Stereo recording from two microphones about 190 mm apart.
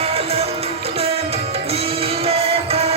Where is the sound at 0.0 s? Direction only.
30° right (ahead or behind).